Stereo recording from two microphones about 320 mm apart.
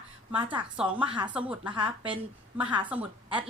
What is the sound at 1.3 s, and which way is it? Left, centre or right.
A woman's voice, centre.